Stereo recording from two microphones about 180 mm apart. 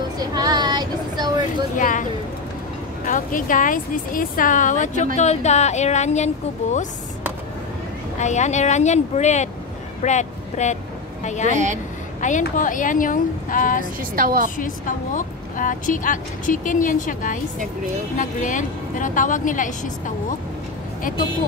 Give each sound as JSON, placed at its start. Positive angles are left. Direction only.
{"t": 0.2, "sound": "vehicle", "side_deg": -20}
{"t": 1.8, "sound": "speech", "side_deg": 45}
{"t": 3.1, "sound": "speech", "side_deg": 50}
{"t": 8.2, "sound": "speech", "side_deg": 40}
{"t": 11.5, "sound": "speech", "side_deg": -40}
{"t": 12.2, "sound": "speech", "side_deg": 45}
{"t": 14.1, "sound": "a woman's voice", "side_deg": -50}
{"t": 14.6, "sound": "speech", "side_deg": 45}